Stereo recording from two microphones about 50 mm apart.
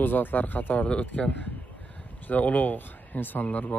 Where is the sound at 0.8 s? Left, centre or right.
Left.